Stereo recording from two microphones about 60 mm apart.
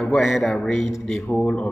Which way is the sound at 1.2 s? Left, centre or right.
Centre.